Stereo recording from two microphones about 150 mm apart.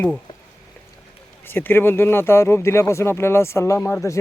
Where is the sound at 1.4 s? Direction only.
15° left (ahead or behind).